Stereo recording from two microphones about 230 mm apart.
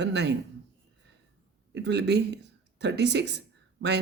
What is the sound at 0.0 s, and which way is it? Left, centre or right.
Speech, right.